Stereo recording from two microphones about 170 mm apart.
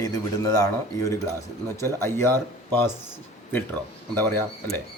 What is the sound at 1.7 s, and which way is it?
Speech, 15° left (ahead or behind).